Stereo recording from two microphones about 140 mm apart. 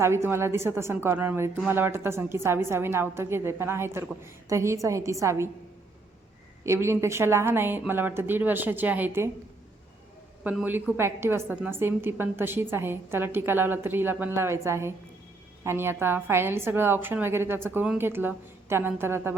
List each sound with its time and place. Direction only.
0.0 s a woman's voice: 15° right (ahead or behind)
6.7 s a woman's voice: 20° right (ahead or behind)
10.5 s a woman's voice: 10° right (ahead or behind)